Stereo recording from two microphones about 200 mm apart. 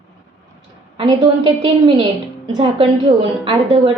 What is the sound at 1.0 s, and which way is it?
A woman's voice, 25° right (ahead or behind).